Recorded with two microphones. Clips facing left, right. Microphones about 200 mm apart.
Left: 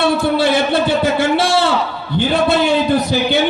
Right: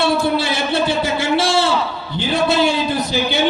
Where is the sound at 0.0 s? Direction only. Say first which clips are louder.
Left 3 dB; 55° left (ahead or behind).